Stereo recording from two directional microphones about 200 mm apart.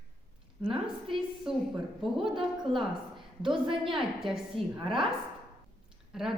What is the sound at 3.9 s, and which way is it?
Speech, centre (ahead or behind).